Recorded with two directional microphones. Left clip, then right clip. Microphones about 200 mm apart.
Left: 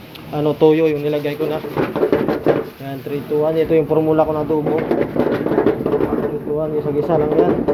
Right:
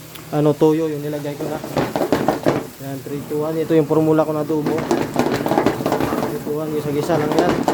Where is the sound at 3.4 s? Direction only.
20° right (ahead or behind).